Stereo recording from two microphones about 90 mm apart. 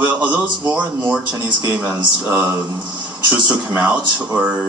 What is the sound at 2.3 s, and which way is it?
Speech, 25° right (ahead or behind).